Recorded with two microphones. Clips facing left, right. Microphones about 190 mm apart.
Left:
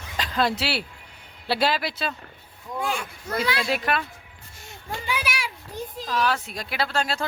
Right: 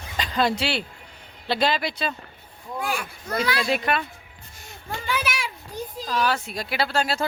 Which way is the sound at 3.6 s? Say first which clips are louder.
Right 1 dB; centre (ahead or behind).